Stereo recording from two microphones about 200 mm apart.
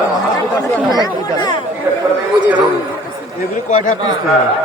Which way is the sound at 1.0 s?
20° left (ahead or behind).